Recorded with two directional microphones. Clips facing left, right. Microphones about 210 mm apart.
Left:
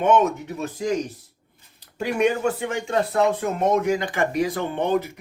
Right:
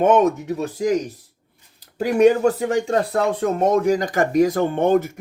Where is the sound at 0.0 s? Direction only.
45° right (ahead or behind).